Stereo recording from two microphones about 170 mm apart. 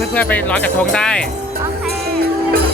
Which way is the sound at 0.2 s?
10° left (ahead or behind).